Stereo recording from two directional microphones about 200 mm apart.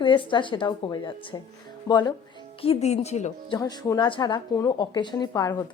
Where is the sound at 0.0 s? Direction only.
25° left (ahead or behind).